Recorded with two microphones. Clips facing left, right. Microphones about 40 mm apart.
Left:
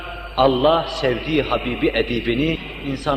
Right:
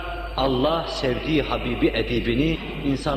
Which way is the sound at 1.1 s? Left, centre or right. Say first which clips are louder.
Left 3 dB; left.